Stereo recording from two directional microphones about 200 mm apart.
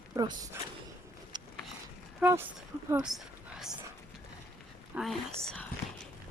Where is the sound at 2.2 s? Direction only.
10° right (ahead or behind).